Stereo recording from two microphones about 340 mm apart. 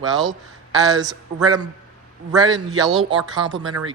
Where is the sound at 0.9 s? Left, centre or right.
Centre.